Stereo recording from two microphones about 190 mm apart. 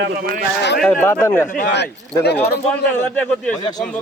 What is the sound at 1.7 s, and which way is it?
Speech, 60° left (ahead or behind).